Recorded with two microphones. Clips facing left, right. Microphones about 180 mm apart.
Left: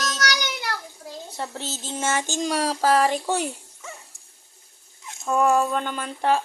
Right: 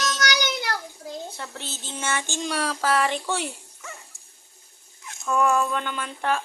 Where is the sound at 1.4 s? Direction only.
35° left (ahead or behind).